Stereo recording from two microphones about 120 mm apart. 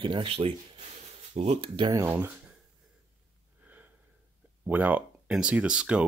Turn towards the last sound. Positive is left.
turn(degrees=-10)  # may be behind; listen again after turning